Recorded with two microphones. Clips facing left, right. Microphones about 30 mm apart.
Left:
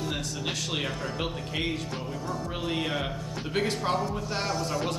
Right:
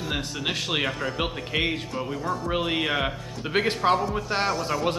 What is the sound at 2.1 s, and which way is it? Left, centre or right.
Speech, centre.